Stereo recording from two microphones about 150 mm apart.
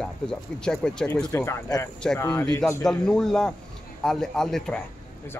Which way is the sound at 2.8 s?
5° left (ahead or behind).